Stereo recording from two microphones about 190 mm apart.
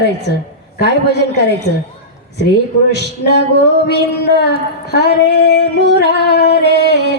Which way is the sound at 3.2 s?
60° left (ahead or behind).